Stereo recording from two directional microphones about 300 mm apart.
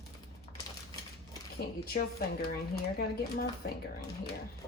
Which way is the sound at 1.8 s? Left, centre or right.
Left.